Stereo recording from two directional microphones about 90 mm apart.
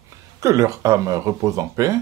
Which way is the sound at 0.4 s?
35° right (ahead or behind).